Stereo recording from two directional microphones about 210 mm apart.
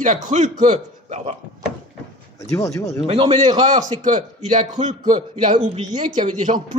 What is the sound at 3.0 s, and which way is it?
A man's voice, 30° right (ahead or behind).